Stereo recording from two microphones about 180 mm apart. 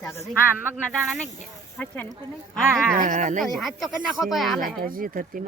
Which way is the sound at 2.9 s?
45° right (ahead or behind).